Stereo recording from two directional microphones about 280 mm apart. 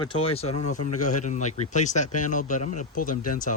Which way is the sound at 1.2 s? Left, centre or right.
Left.